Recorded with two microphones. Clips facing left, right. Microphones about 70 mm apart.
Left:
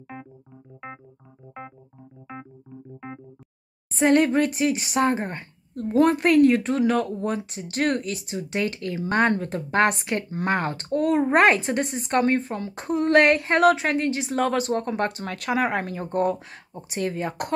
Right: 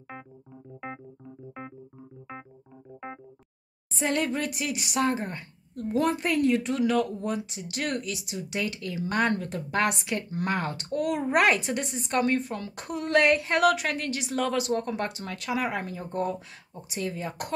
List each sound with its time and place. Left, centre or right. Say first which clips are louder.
0.1 s keyboard: left 4 dB; centre
3.9 s speech: left 9 dB; left
13.1 s a woman's voice: left 4 dB; left
13.5 s a woman's voice: left 5 dB; left